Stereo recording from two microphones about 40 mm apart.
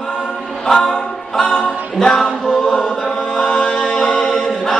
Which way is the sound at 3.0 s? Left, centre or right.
Centre.